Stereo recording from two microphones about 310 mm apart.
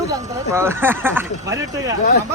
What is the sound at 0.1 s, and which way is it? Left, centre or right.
Speech, centre.